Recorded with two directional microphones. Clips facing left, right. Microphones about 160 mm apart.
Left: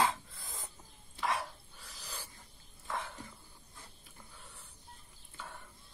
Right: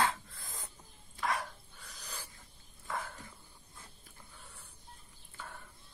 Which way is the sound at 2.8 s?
Centre (ahead or behind).